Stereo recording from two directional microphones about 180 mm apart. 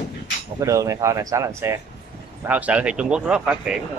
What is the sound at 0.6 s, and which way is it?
Speech, 15° right (ahead or behind).